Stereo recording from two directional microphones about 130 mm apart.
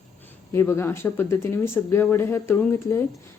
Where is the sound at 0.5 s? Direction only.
20° left (ahead or behind).